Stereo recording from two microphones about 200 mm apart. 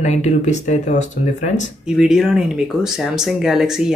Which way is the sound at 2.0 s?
5° right (ahead or behind).